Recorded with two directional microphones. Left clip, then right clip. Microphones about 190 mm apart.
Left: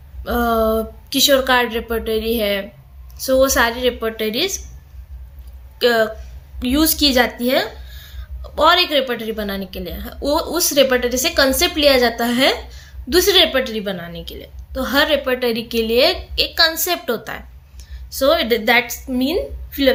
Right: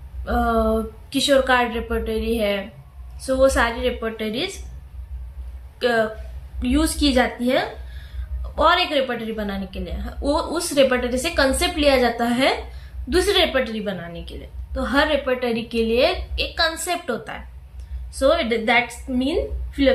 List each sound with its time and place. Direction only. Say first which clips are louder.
0.3 s a woman's voice: left 3 dB; 55° left (ahead or behind)
5.8 s speech: left 4 dB; 60° left (ahead or behind)